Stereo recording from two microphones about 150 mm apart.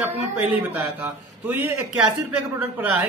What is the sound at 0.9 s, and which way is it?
A man's voice, 10° right (ahead or behind).